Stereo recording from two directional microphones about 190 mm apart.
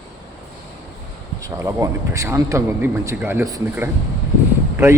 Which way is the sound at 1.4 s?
15° right (ahead or behind).